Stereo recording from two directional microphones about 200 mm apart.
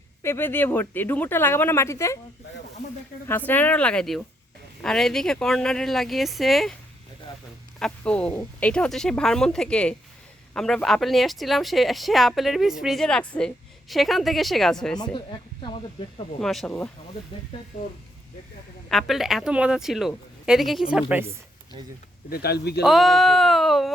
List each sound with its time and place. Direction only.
0.2 s speech: 10° left (ahead or behind)
3.2 s speech: 10° left (ahead or behind)
7.8 s speech: 5° left (ahead or behind)
15.1 s speech: 25° left (ahead or behind)
16.4 s speech: centre (ahead or behind)
18.9 s a woman's voice: centre (ahead or behind)
22.3 s speech: 50° left (ahead or behind)
22.8 s speech: centre (ahead or behind)